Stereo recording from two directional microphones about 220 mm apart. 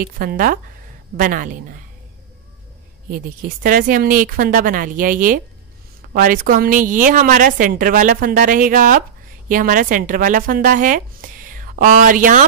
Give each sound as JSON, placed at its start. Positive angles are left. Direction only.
{"t": 0.0, "sound": "speech", "side_deg": -40}
{"t": 3.1, "sound": "speech", "side_deg": -40}